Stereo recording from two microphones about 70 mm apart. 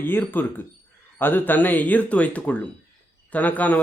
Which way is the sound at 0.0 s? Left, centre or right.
Left.